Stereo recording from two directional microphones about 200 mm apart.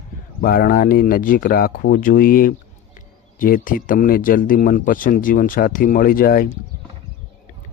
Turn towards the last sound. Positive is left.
turn(degrees=45)  # may be behind; listen again after turning